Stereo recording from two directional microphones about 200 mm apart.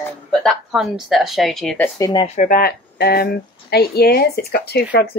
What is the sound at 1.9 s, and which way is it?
Speech, 20° left (ahead or behind).